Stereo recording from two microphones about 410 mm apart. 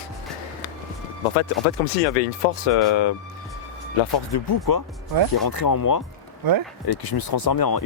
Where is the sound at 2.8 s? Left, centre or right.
Left.